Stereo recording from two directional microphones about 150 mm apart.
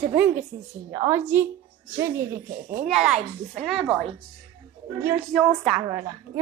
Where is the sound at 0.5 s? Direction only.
20° right (ahead or behind).